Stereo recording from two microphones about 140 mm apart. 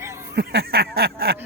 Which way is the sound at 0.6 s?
90° right.